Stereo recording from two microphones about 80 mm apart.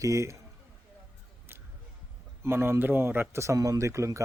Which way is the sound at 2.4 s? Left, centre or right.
Right.